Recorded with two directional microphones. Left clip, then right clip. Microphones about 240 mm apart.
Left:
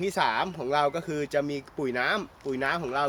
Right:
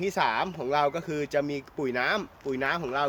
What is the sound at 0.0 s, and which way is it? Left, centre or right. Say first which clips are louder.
Speech: even; centre.